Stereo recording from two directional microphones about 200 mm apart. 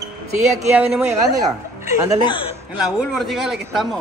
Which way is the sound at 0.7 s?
5° right (ahead or behind).